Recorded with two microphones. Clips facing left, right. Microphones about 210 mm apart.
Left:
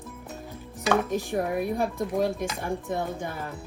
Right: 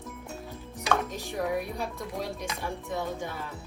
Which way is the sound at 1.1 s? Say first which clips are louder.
Left 4 dB; 55° left (ahead or behind).